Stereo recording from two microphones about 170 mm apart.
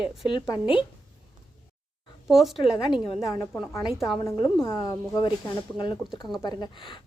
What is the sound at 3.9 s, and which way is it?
Speech, centre (ahead or behind).